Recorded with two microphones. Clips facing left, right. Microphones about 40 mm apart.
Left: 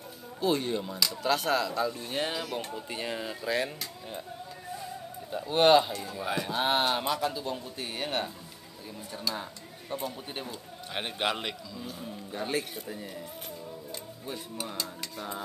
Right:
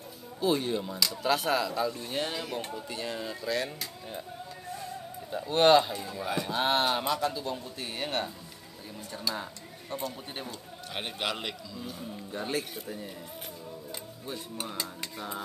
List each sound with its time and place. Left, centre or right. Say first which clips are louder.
0.4 s speech: even; centre
2.9 s speech: left 2 dB; centre
5.3 s speech: even; centre
15.1 s speech: even; centre